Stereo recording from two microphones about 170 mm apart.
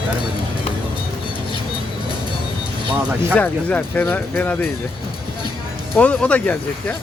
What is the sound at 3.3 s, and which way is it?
Speech, 10° left (ahead or behind).